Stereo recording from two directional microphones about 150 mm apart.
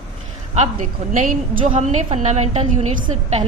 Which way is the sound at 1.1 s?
65° right (ahead or behind).